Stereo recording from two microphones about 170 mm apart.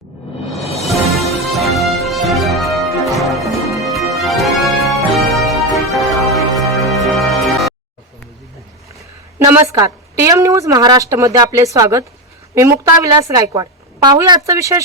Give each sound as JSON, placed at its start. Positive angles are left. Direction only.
{"t": 1.5, "sound": "music", "side_deg": 0}
{"t": 9.4, "sound": "a woman's voice", "side_deg": -20}